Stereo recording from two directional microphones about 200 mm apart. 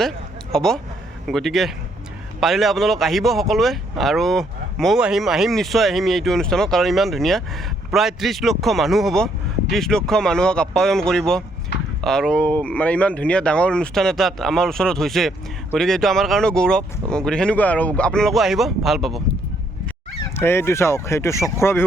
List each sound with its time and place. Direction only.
0.5 s speech: centre (ahead or behind)
11.7 s a sound: 55° left (ahead or behind)
12.0 s speech: centre (ahead or behind)
20.3 s speech: 10° left (ahead or behind)